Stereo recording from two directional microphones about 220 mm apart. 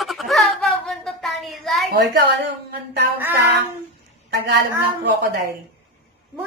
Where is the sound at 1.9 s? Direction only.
50° right (ahead or behind).